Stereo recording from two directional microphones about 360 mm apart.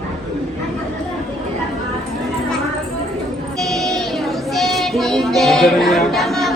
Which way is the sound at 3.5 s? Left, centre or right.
Centre.